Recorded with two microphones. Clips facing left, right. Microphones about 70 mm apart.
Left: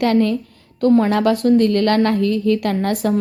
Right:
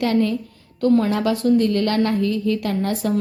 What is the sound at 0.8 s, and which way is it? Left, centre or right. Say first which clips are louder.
Speech: left 3 dB; left.